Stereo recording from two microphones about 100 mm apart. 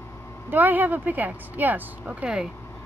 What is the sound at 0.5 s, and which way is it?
Speech, 20° right (ahead or behind).